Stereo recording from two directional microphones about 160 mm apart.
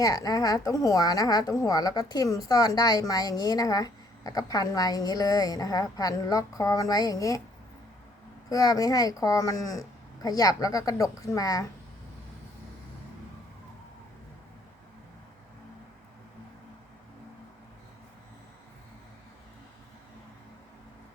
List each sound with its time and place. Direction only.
0.0 s a woman's voice: 25° left (ahead or behind)
8.4 s a woman's voice: 20° left (ahead or behind)